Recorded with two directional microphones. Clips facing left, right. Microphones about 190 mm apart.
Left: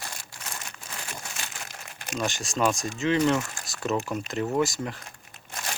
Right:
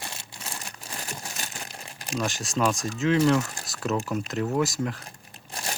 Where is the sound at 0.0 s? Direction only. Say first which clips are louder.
Right 1 dB; 25° right (ahead or behind).